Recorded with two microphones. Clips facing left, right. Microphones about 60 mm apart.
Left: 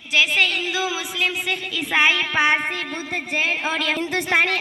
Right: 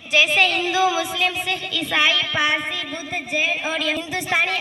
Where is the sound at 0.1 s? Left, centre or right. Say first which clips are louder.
Right 2 dB; centre.